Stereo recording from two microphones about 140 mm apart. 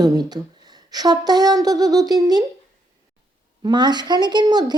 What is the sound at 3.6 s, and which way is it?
A woman's voice, 30° right (ahead or behind).